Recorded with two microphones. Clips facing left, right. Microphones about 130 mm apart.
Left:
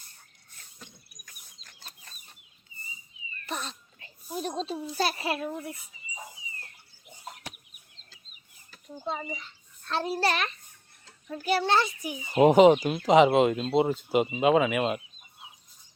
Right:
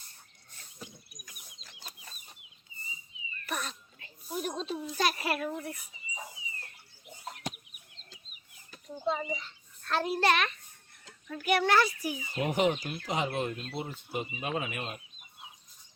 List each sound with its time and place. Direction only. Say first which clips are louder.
0.8 s bird: right 5 dB; 10° right (ahead or behind)
1.6 s chicken: right 1 dB; 10° right (ahead or behind)
3.4 s a child's voice: left 1 dB; 30° left (ahead or behind)
9.8 s a child's voice: even; 30° left (ahead or behind)
12.3 s speech: left 12 dB; 90° left